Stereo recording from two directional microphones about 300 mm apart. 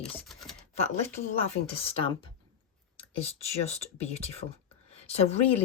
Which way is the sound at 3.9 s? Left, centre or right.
Left.